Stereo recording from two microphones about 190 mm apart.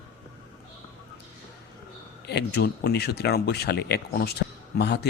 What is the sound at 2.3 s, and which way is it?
Speech, 60° left (ahead or behind).